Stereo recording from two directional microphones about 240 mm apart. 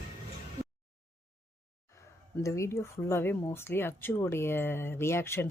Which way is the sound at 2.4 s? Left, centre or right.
Centre.